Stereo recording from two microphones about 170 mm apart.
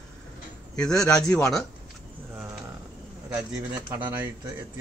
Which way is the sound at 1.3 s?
5° left (ahead or behind).